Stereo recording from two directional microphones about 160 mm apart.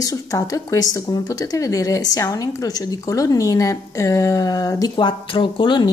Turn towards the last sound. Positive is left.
turn(degrees=30)  # may be behind; listen again after turning